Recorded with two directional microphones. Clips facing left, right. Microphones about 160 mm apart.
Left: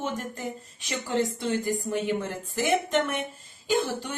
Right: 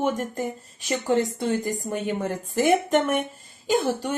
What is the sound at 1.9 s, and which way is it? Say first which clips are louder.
Speech: right 1 dB; 45° right (ahead or behind).